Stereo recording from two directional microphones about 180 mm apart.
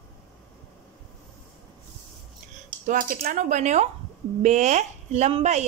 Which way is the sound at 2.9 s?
50° right (ahead or behind).